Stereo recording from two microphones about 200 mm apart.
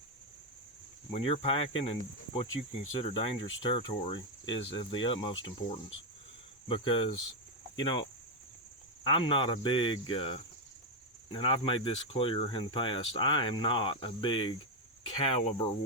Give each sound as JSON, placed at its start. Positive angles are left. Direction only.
{"t": 1.1, "sound": "speech", "side_deg": 30}
{"t": 9.0, "sound": "speech", "side_deg": 25}